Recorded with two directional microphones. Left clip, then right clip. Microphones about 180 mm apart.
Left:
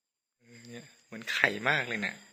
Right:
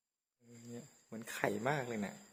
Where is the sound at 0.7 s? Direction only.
10° right (ahead or behind).